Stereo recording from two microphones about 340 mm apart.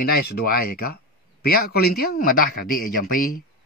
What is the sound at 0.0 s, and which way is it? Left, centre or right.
Speech, left.